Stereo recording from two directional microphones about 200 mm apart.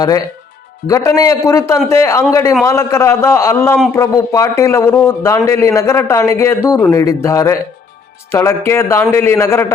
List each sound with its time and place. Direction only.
0.9 s a man's voice: 15° left (ahead or behind)